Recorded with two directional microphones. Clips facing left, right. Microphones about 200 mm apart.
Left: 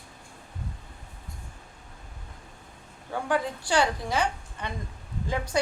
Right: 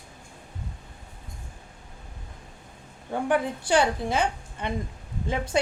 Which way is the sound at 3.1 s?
20° right (ahead or behind).